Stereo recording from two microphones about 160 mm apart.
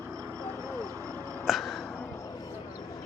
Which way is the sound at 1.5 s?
Centre (ahead or behind).